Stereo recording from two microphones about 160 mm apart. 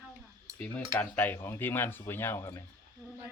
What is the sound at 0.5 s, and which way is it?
Speech, 10° left (ahead or behind).